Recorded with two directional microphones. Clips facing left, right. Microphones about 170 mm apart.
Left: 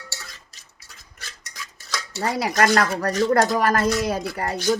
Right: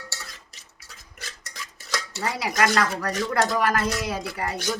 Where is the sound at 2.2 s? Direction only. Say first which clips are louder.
Left 4 dB; 45° left (ahead or behind).